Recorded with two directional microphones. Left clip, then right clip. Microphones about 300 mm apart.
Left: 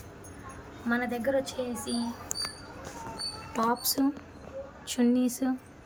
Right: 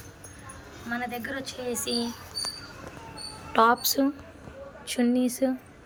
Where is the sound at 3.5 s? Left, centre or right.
Centre.